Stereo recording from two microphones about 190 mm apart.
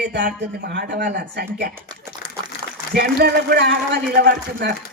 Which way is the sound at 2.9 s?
55° right (ahead or behind).